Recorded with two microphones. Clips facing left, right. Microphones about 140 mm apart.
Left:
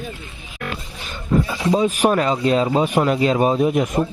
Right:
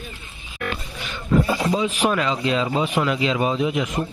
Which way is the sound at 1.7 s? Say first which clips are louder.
Left 8 dB; 45° left (ahead or behind).